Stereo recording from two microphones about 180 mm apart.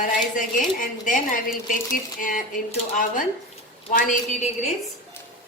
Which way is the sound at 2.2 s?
45° left (ahead or behind).